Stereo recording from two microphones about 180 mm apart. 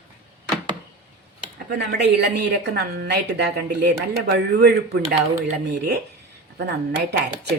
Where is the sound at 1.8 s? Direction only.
65° right (ahead or behind).